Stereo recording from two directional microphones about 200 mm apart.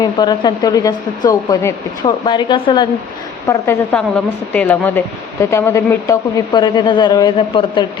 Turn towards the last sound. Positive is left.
turn(degrees=25)  # may be behind; listen again after turning